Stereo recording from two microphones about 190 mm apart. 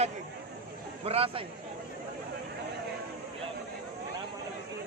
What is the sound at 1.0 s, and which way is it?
Speech, 30° right (ahead or behind).